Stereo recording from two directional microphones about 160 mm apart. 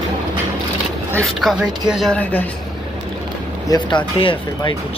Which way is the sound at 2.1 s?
10° left (ahead or behind).